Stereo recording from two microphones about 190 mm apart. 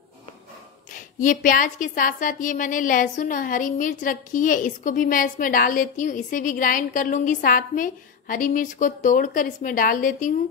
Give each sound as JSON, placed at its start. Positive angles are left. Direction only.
{"t": 1.2, "sound": "a woman's voice", "side_deg": 45}